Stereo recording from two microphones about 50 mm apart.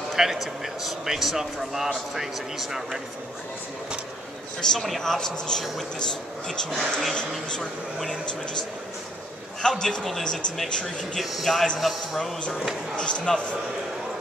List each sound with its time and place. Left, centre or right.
0.1 s speech: centre
4.6 s speech: centre
7.2 s speech: centre
9.6 s speech: centre
11.1 s speech: centre
12.9 s speech: centre